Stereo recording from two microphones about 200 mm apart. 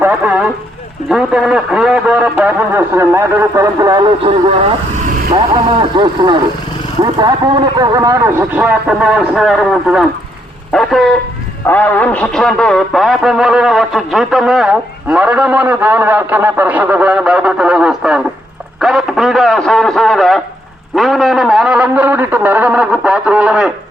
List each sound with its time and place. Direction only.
0.0 s vehicle: 5° right (ahead or behind)
1.1 s speech: 5° right (ahead or behind); by 4.7 s 30° right (ahead or behind)
6.0 s speech: 25° right (ahead or behind); by 20.4 s centre (ahead or behind)
20.9 s a sound: centre (ahead or behind)